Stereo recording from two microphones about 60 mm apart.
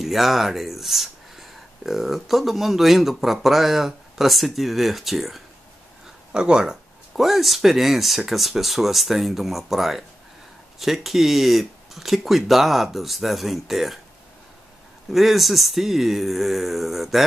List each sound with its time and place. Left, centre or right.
0.0 s speech: centre
6.3 s speech: centre
15.0 s speech: centre